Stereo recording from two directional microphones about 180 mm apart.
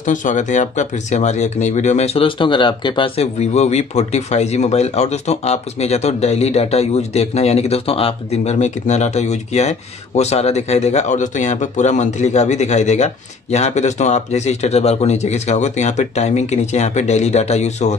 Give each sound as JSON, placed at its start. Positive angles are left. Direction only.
{"t": 0.0, "sound": "speech", "side_deg": 45}